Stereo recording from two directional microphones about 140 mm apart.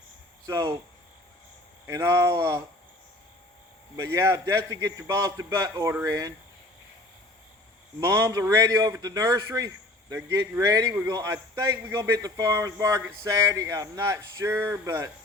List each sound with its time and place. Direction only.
0.4 s a man's voice: 25° right (ahead or behind)
1.9 s a man's voice: 20° right (ahead or behind)
3.9 s a man's voice: 20° right (ahead or behind)
8.0 s a man's voice: 20° right (ahead or behind)